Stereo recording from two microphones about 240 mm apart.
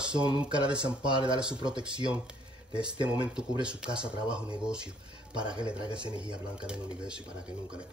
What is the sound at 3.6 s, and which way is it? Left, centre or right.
Speech, centre.